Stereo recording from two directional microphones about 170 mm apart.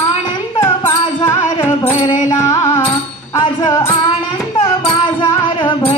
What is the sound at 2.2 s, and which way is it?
Carnatic music, 15° left (ahead or behind).